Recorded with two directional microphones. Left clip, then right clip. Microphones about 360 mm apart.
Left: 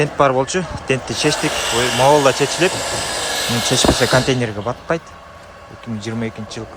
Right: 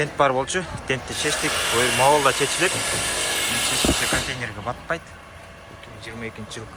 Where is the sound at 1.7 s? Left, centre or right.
Centre.